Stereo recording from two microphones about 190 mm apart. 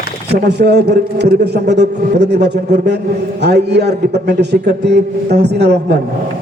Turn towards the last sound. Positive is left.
turn(degrees=-60)  # may be behind; listen again after turning